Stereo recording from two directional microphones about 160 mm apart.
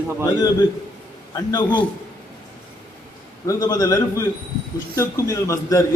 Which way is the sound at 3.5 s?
25° left (ahead or behind).